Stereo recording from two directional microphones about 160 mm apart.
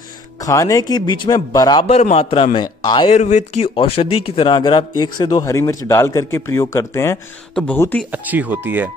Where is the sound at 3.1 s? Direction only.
50° left (ahead or behind); by 8.0 s 10° left (ahead or behind).